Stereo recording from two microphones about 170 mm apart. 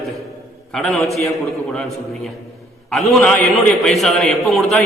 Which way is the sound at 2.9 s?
5° left (ahead or behind).